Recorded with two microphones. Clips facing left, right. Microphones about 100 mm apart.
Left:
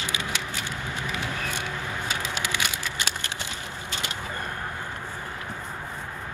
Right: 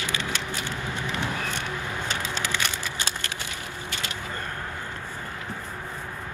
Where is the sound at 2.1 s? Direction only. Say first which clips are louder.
Even; 15° left (ahead or behind).